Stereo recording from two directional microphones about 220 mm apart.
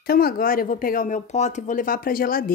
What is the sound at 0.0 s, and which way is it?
Speech, 45° left (ahead or behind).